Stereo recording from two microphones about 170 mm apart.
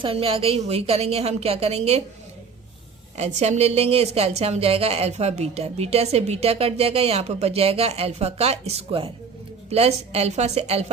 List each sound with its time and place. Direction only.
0.0 s a woman's voice: 35° right (ahead or behind)
3.2 s a woman's voice: 45° right (ahead or behind)